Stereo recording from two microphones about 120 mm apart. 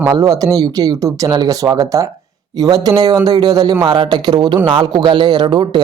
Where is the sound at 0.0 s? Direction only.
30° right (ahead or behind).